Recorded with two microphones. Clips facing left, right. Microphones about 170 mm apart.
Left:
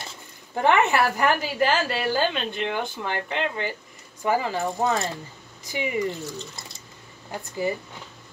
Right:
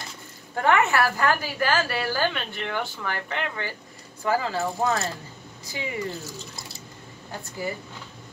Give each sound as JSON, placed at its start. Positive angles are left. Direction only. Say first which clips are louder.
{"t": 0.6, "sound": "a woman's voice", "louder": "left 1 dB", "side_deg": 20}
{"t": 7.2, "sound": "speech", "louder": "left 5 dB", "side_deg": 20}